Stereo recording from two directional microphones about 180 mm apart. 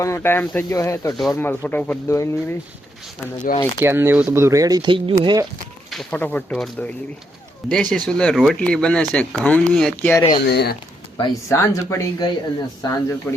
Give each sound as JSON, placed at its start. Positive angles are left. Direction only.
{"t": 0.0, "sound": "speech", "side_deg": 15}
{"t": 3.8, "sound": "speech", "side_deg": -15}
{"t": 5.9, "sound": "speech", "side_deg": 5}
{"t": 10.2, "sound": "speech", "side_deg": 25}
{"t": 10.4, "sound": "speech", "side_deg": 65}
{"t": 11.2, "sound": "speech", "side_deg": 15}